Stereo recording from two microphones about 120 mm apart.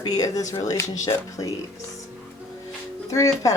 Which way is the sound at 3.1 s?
25° left (ahead or behind).